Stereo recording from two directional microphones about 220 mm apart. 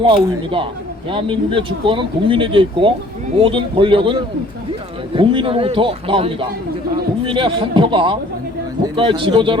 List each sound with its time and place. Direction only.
0.0 s speech: 25° right (ahead or behind)